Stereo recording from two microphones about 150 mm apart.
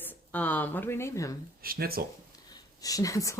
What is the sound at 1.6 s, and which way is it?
Speech, 80° right.